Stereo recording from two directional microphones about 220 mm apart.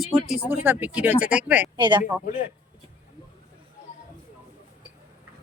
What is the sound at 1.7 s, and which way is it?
Speech, 20° right (ahead or behind).